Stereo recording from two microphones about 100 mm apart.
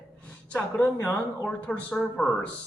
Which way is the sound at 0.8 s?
25° left (ahead or behind).